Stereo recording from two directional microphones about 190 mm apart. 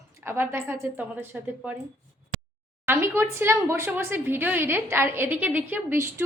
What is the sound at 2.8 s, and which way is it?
Speech, 10° right (ahead or behind).